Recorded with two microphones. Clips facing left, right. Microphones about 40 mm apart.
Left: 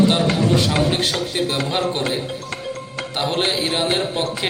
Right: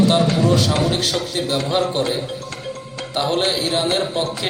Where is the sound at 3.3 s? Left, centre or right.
Left.